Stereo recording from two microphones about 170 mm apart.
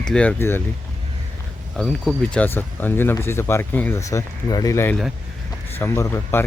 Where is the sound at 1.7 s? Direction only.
Centre (ahead or behind).